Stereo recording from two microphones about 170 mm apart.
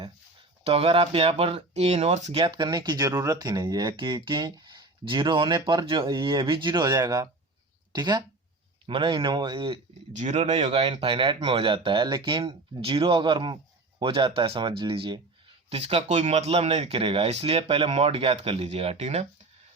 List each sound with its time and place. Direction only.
0.6 s speech: 35° right (ahead or behind)
10.2 s speech: 40° right (ahead or behind)